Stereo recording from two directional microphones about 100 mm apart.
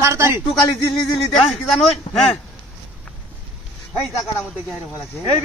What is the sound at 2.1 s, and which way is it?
Speech, 60° left (ahead or behind).